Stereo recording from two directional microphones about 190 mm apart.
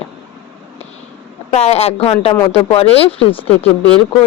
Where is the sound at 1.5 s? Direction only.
35° left (ahead or behind).